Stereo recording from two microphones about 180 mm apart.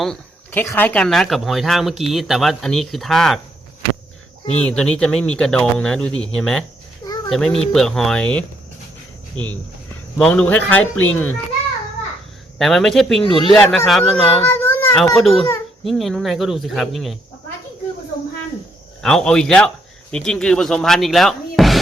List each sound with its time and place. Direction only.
0.0 s a sound: 5° left (ahead or behind)
0.6 s speech: 10° left (ahead or behind)
4.6 s a child's voice: 5° left (ahead or behind)
10.2 s speech: 5° left (ahead or behind)
12.5 s speech: centre (ahead or behind)
13.2 s speech: 25° left (ahead or behind)
13.5 s speech: centre (ahead or behind)
14.4 s a sound: 10° left (ahead or behind)
15.1 s speech: centre (ahead or behind)
19.0 s speech: 5° left (ahead or behind)